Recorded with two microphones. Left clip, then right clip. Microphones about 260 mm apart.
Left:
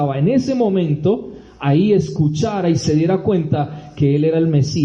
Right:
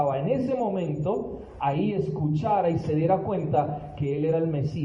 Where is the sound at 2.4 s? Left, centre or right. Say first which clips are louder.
Left 4 dB; left.